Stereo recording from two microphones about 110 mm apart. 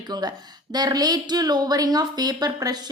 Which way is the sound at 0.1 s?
35° right (ahead or behind).